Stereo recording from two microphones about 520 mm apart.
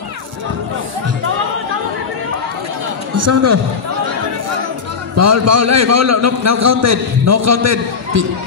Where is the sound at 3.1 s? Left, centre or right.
Right.